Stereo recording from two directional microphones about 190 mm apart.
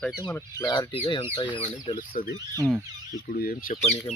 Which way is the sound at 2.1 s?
45° left (ahead or behind).